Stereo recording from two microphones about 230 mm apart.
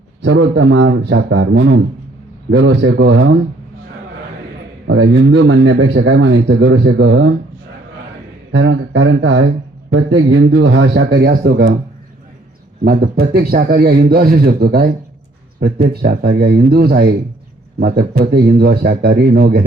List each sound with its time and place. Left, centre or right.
0.2 s speech: right
4.9 s speech: right
8.5 s a man's voice: right
12.8 s a man's voice: right